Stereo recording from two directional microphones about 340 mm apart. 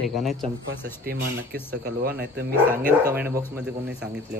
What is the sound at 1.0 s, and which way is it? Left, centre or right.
Speech, right.